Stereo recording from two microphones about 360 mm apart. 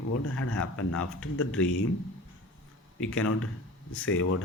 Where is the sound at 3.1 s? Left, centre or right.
Left.